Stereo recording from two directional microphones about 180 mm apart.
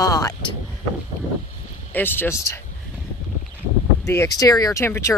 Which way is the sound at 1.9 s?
10° left (ahead or behind).